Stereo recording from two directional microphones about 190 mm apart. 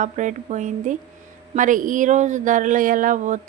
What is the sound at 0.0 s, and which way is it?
A woman's voice, 40° right (ahead or behind).